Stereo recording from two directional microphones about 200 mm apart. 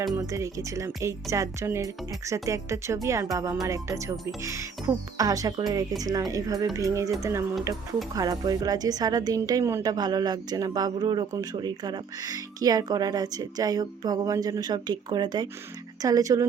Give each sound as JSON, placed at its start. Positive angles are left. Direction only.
{"t": 0.0, "sound": "speech", "side_deg": -15}
{"t": 5.1, "sound": "a woman's voice", "side_deg": -15}